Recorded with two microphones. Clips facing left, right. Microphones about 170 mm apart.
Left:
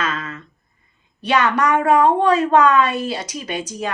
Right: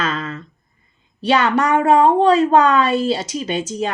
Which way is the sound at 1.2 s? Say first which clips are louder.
Right 2 dB; 30° right (ahead or behind).